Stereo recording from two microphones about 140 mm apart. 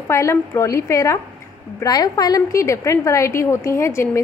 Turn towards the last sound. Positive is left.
turn(degrees=20)  # may be behind; listen again after turning